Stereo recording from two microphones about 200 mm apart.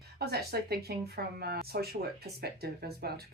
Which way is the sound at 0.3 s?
50° right (ahead or behind).